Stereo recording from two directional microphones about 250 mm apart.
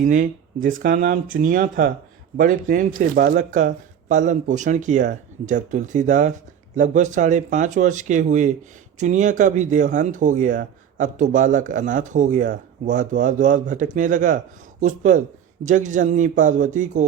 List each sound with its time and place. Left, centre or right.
0.0 s speech: right